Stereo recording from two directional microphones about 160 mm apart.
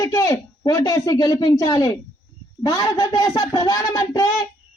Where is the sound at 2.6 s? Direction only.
20° left (ahead or behind).